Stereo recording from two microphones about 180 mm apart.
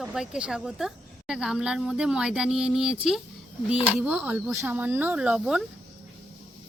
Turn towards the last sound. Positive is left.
turn(degrees=-5)  # may be behind; listen again after turning